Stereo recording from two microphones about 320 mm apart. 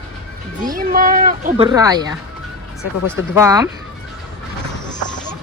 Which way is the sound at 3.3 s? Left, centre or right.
Centre.